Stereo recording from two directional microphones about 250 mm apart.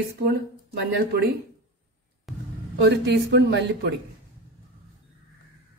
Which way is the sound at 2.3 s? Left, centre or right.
Centre.